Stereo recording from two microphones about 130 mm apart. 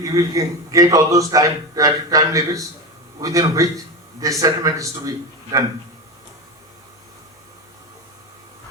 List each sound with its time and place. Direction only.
0.0 s a man's voice: 25° right (ahead or behind)